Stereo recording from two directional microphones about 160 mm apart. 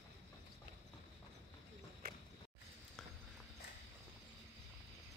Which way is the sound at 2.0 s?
65° right (ahead or behind).